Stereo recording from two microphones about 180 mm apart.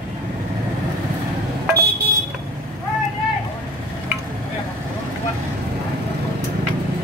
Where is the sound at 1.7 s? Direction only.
60° right (ahead or behind).